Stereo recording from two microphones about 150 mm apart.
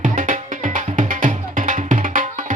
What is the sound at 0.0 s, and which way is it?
Music, 60° right (ahead or behind).